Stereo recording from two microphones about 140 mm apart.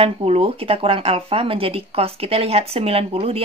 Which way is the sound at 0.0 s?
45° right (ahead or behind).